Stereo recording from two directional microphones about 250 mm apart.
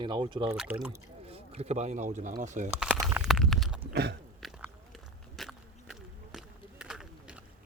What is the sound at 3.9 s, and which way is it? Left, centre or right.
Chewing, right.